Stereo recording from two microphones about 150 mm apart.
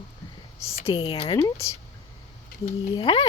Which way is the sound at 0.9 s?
35° left (ahead or behind).